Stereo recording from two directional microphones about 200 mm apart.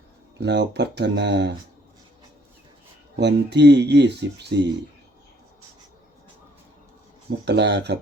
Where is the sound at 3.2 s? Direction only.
60° right (ahead or behind).